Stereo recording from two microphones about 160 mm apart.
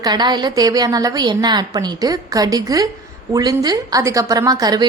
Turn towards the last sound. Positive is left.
turn(degrees=-25)  # may be behind; listen again after turning